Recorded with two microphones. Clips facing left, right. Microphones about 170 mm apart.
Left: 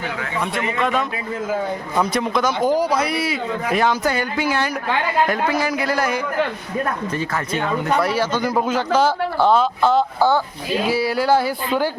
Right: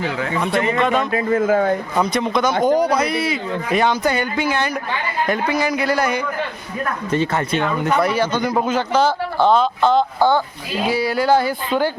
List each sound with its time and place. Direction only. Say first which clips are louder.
0.8 s a man's voice: even; centre (ahead or behind)
1.1 s speech: right 8 dB; 55° right (ahead or behind)
2.0 s a man's voice: left 2 dB; 5° left (ahead or behind)
7.1 s speech: right 4 dB; 25° right (ahead or behind)
7.9 s a man's voice: right 2 dB; 5° left (ahead or behind)